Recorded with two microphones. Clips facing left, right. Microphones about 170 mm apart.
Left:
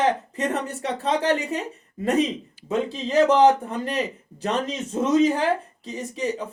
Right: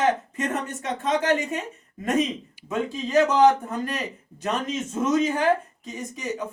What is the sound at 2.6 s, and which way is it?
A man's voice, 30° left (ahead or behind).